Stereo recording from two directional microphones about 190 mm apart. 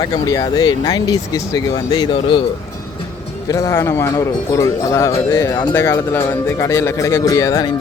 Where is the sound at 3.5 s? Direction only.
15° left (ahead or behind).